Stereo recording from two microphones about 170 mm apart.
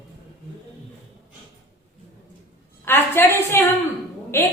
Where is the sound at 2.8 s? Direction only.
15° left (ahead or behind).